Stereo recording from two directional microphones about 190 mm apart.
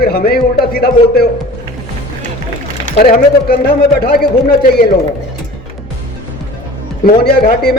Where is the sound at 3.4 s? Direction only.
50° left (ahead or behind).